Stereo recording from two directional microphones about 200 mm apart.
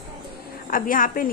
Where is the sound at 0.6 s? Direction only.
45° left (ahead or behind).